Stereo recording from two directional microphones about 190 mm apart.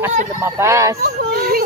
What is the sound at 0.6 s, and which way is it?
Speech, 15° right (ahead or behind).